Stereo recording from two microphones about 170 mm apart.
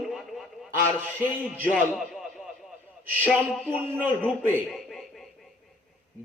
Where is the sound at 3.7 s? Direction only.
15° right (ahead or behind).